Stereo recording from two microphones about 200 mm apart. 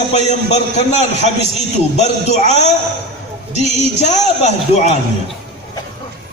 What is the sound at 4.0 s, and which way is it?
Speech, 35° left (ahead or behind).